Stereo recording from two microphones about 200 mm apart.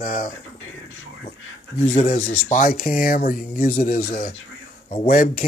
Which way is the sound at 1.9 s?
40° left (ahead or behind).